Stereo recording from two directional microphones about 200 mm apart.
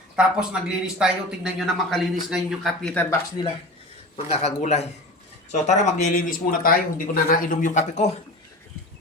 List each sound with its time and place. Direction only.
0.2 s a man's voice: 5° right (ahead or behind); by 3.4 s 10° left (ahead or behind)
4.3 s speech: 35° left (ahead or behind)